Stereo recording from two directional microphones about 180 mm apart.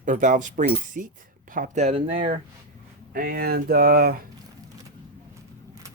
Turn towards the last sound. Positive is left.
turn(degrees=-55)  # may be behind; listen again after turning